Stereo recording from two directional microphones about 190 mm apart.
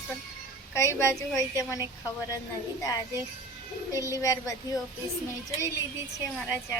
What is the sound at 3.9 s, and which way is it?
Speech, 15° left (ahead or behind).